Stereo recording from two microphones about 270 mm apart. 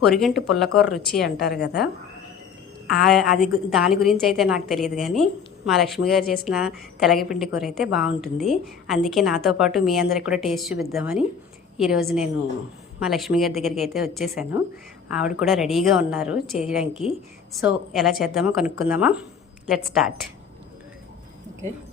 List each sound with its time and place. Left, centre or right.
0.0 s a woman's voice: centre
1.4 s a woman's voice: left
2.9 s a woman's voice: centre